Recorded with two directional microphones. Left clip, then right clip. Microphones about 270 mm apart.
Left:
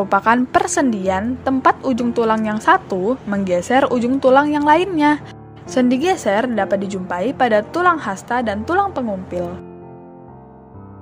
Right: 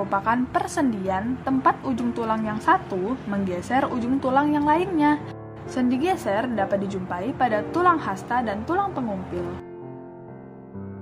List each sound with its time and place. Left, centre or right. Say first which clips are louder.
0.1 s a woman's voice: left 9 dB; left